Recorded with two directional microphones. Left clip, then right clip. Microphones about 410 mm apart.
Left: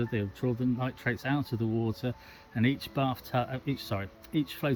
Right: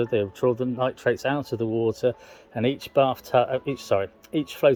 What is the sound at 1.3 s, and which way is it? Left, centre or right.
Speech, centre.